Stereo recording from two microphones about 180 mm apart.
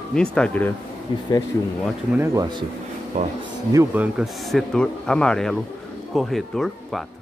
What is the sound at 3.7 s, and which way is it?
Speech, 10° right (ahead or behind).